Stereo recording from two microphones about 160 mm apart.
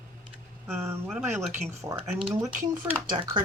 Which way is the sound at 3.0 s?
25° right (ahead or behind).